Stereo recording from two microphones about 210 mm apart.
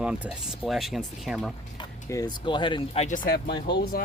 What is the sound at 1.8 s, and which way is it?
Speech, 20° left (ahead or behind).